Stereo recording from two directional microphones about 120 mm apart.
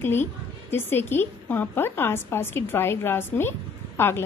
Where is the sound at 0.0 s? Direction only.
20° left (ahead or behind).